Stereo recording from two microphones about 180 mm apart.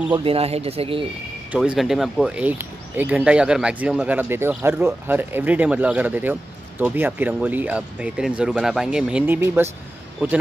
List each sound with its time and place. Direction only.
0.1 s speech: 30° right (ahead or behind)
1.5 s speech: 5° right (ahead or behind)